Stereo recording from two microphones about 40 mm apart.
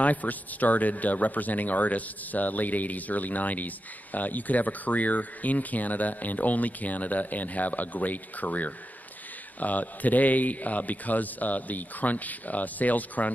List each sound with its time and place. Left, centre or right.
0.0 s speech: left